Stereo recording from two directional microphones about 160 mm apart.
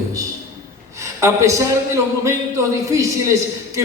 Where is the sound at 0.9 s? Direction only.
20° right (ahead or behind).